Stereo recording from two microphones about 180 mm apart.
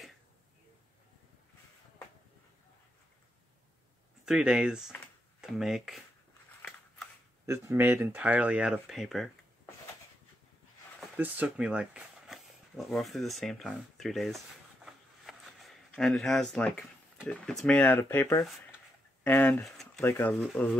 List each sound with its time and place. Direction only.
4.3 s speech: 5° right (ahead or behind)
7.4 s speech: 15° right (ahead or behind)
11.1 s speech: 10° right (ahead or behind)
14.9 s a sound: centre (ahead or behind)
17.3 s speech: 5° left (ahead or behind)